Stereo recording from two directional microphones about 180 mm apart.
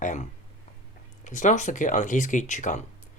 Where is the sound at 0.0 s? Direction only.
40° left (ahead or behind).